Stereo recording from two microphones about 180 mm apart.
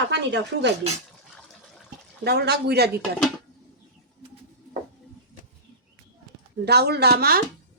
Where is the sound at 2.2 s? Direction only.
65° right (ahead or behind).